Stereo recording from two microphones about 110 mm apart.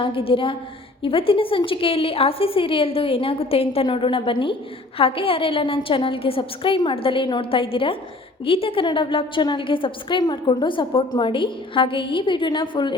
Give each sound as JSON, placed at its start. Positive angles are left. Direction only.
{"t": 0.0, "sound": "a woman's voice", "side_deg": 55}